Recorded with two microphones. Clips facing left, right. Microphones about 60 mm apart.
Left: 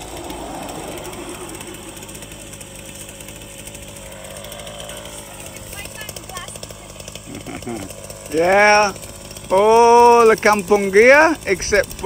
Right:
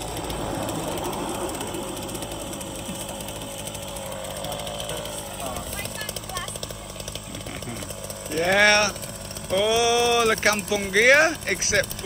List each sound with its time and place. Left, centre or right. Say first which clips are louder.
8.4 s speech: left 7 dB; left